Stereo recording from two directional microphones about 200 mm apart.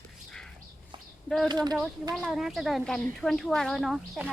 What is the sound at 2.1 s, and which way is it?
A woman's voice, centre (ahead or behind).